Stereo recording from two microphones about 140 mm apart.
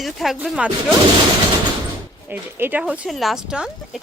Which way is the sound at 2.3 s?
15° right (ahead or behind).